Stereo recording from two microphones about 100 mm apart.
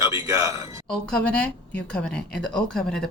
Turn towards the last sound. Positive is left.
turn(degrees=5)  # may be behind; listen again after turning